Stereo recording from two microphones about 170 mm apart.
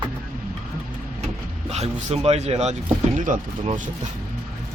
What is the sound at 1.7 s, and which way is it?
Speech, 40° right (ahead or behind).